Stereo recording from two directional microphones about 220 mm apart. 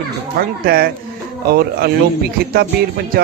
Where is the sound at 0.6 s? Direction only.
45° right (ahead or behind).